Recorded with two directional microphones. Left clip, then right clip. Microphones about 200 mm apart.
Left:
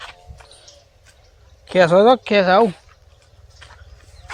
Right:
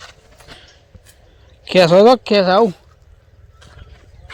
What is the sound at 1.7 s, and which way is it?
Speech, 40° right (ahead or behind).